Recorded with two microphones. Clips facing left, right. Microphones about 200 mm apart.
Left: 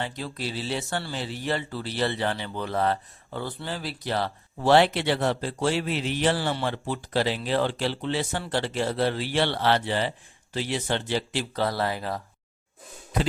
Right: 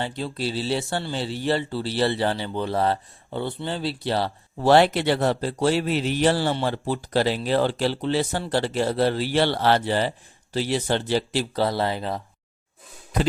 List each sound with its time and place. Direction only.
0.0 s speech: 30° right (ahead or behind)